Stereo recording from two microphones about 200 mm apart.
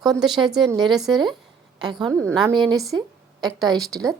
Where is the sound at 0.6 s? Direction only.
20° right (ahead or behind).